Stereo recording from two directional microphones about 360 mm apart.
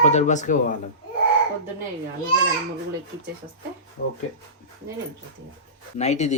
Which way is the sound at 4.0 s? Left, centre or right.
Left.